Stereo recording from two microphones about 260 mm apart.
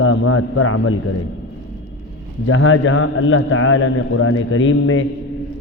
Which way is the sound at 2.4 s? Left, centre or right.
Left.